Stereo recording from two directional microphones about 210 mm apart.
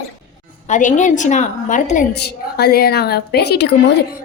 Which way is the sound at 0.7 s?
35° left (ahead or behind).